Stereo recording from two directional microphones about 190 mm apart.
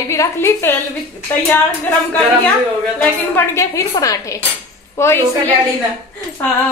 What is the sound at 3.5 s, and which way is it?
A woman's voice, 15° left (ahead or behind).